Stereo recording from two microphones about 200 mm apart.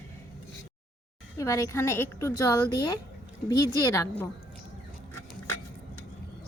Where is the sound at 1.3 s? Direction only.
15° left (ahead or behind).